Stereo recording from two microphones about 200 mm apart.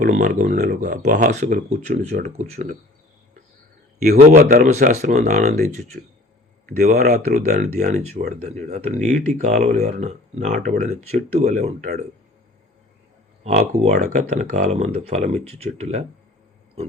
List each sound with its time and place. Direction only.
0.0 s speech: 45° right (ahead or behind)
4.3 s speech: 40° right (ahead or behind)
13.4 s speech: 35° right (ahead or behind)